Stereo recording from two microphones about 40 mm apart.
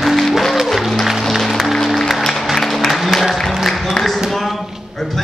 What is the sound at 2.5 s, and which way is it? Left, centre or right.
Applause, centre.